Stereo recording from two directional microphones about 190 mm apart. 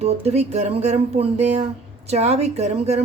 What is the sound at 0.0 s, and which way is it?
A woman's voice, 35° right (ahead or behind).